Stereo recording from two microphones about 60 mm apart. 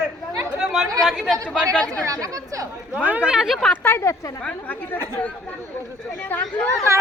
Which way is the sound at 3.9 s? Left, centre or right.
Left.